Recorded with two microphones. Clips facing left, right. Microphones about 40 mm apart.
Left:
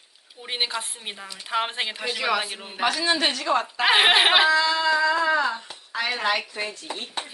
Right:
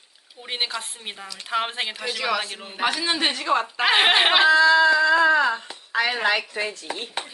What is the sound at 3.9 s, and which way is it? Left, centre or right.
Speech, centre.